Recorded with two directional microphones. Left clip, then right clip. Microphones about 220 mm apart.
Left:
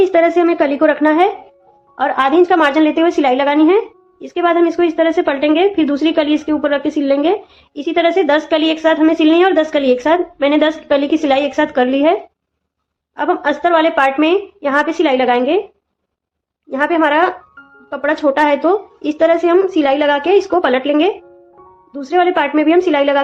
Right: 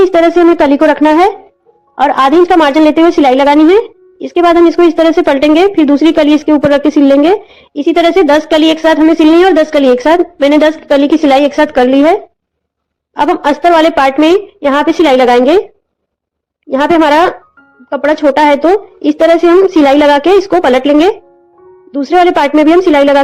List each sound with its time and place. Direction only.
0.0 s speech: 25° right (ahead or behind)
16.6 s speech: 30° right (ahead or behind)